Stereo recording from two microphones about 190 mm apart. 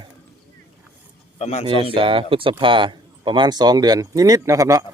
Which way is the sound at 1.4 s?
35° left (ahead or behind).